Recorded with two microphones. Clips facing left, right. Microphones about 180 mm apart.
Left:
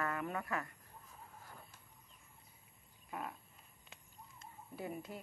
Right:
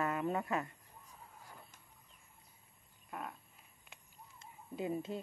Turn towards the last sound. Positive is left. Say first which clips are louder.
# right 6 dB
turn(degrees=-25)  # may be behind; listen again after turning